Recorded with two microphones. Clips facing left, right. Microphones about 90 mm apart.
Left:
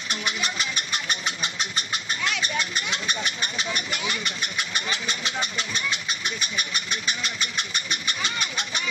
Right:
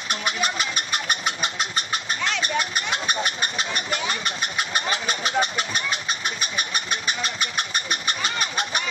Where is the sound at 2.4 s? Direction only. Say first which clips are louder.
Right 3 dB; 50° right (ahead or behind).